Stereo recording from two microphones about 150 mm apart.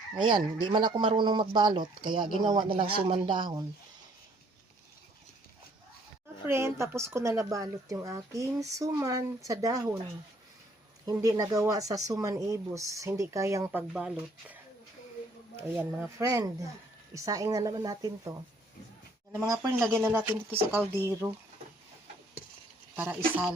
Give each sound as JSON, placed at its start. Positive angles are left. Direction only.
{"t": 0.2, "sound": "speech", "side_deg": -30}
{"t": 6.5, "sound": "a woman's voice", "side_deg": -15}
{"t": 11.0, "sound": "a woman's voice", "side_deg": -25}
{"t": 15.8, "sound": "a woman's voice", "side_deg": -15}
{"t": 21.2, "sound": "speech", "side_deg": 0}
{"t": 23.0, "sound": "speech", "side_deg": -10}